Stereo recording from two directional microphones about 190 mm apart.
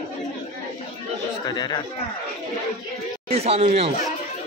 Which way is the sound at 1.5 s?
20° left (ahead or behind).